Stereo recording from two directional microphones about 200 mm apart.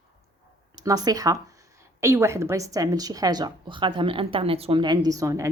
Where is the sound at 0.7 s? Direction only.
20° right (ahead or behind).